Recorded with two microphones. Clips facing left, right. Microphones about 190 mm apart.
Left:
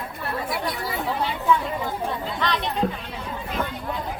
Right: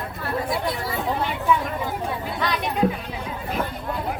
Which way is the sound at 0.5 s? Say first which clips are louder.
Right 2 dB; 25° right (ahead or behind).